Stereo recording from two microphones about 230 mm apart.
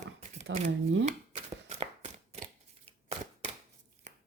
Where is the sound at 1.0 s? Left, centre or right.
Right.